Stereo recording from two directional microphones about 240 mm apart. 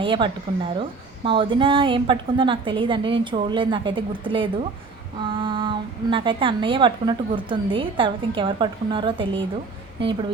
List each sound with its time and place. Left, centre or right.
0.0 s a woman's voice: right